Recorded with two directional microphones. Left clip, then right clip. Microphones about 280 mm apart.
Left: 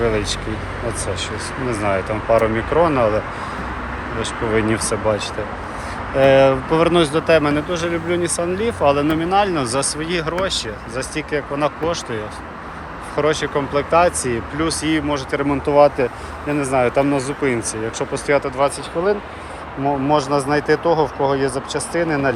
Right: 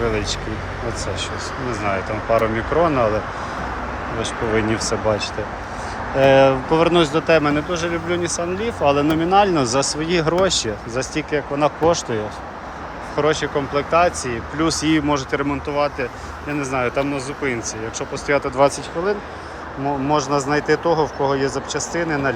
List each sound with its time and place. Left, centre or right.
0.0 s speech: centre
1.7 s speech: centre
4.2 s speech: centre
21.9 s speech: centre